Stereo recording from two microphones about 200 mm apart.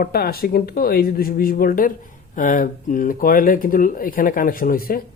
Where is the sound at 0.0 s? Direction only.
50° left (ahead or behind).